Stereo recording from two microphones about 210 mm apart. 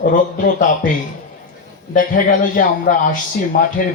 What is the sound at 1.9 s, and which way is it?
Speech, 40° left (ahead or behind).